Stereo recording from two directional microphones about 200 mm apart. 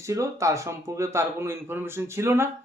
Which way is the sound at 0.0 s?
15° right (ahead or behind).